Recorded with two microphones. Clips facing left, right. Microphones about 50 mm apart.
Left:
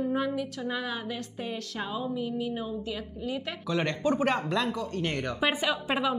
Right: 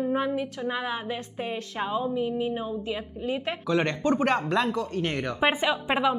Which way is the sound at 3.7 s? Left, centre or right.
Centre.